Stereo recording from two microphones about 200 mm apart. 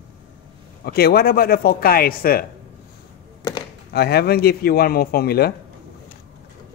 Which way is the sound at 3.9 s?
50° left (ahead or behind).